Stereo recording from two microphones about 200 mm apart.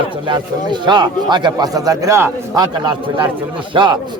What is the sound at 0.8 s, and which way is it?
A man's voice, 20° right (ahead or behind).